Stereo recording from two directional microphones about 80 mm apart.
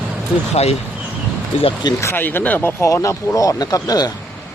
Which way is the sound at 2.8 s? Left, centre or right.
Left.